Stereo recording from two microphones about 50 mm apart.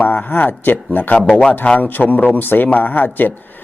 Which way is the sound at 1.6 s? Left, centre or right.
Left.